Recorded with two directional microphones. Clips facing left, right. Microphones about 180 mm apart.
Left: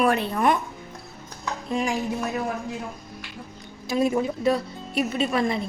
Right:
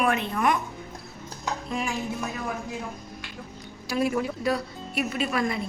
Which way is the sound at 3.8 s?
20° left (ahead or behind).